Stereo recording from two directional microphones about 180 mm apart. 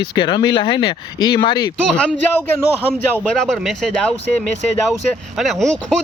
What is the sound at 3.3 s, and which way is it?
Speech, 5° left (ahead or behind).